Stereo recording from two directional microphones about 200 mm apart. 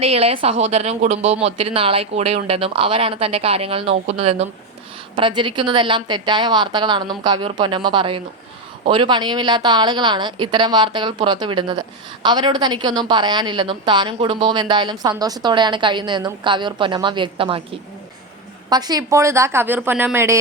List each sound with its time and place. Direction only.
0.0 s a woman's voice: 30° right (ahead or behind)
18.7 s a woman's voice: 20° right (ahead or behind)